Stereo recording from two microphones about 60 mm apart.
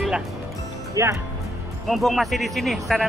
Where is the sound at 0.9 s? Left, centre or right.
Right.